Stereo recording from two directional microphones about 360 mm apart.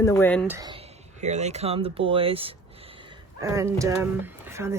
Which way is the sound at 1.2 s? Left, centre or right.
Centre.